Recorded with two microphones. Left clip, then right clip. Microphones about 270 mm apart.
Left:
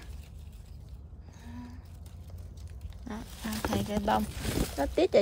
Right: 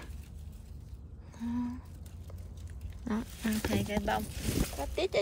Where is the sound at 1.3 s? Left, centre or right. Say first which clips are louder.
Right 11 dB; centre.